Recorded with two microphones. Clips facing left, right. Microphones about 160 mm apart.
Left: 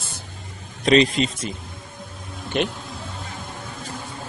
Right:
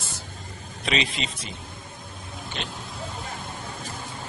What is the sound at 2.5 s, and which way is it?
Speech, 60° left (ahead or behind).